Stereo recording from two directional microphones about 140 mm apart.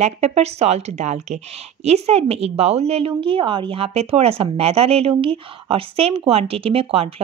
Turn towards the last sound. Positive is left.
turn(degrees=-40)  # may be behind; listen again after turning